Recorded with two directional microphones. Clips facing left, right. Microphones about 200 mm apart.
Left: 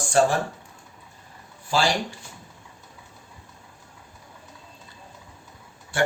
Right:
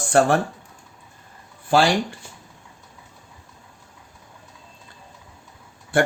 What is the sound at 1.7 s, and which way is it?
Speech, 60° right (ahead or behind).